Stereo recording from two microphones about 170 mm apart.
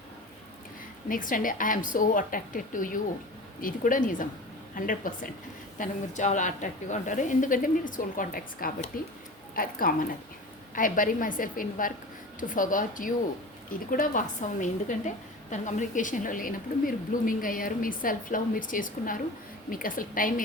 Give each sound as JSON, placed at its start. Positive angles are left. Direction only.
{"t": 1.0, "sound": "a woman's voice", "side_deg": 55}